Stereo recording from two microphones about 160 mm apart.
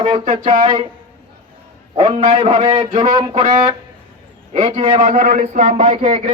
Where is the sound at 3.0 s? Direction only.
25° right (ahead or behind).